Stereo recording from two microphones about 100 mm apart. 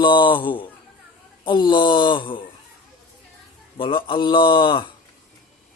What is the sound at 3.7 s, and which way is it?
A man's voice, 60° left (ahead or behind).